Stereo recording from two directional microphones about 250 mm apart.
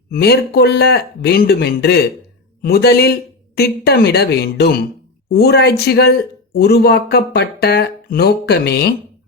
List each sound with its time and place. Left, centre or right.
0.1 s speech: left